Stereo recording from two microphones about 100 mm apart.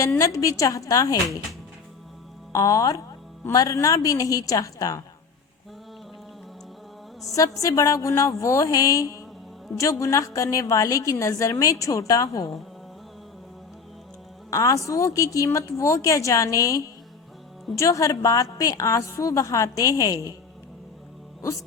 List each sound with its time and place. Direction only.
0.2 s a woman's voice: 35° left (ahead or behind)
2.5 s a woman's voice: 35° left (ahead or behind)
7.6 s a woman's voice: 35° left (ahead or behind)
14.5 s a woman's voice: 30° left (ahead or behind)